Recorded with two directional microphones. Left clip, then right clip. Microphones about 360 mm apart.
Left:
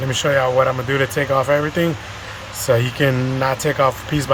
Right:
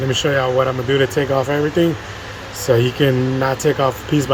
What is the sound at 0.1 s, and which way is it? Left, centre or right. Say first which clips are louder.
Speech: left 1 dB; centre.